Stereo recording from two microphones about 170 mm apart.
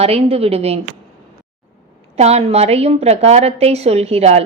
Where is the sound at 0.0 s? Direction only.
35° right (ahead or behind).